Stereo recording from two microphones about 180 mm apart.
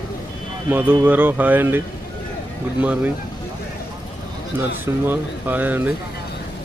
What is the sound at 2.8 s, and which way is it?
Speech, 10° right (ahead or behind).